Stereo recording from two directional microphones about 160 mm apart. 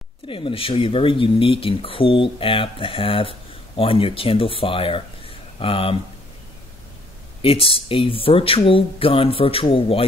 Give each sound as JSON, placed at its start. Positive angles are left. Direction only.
{"t": 0.3, "sound": "speech", "side_deg": 35}
{"t": 7.4, "sound": "speech", "side_deg": 35}